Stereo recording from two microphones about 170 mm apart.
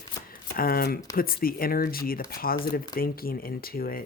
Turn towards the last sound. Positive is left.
turn(degrees=60)  # may be behind; listen again after turning